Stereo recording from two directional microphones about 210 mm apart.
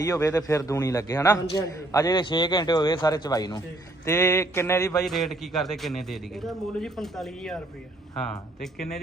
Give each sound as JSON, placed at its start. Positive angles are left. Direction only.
{"t": 0.0, "sound": "a man's voice", "side_deg": 15}
{"t": 5.0, "sound": "a man's voice", "side_deg": 0}